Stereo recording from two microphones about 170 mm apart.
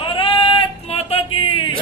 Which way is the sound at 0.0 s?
30° left (ahead or behind).